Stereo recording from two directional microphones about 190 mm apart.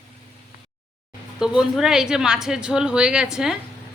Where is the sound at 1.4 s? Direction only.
5° right (ahead or behind).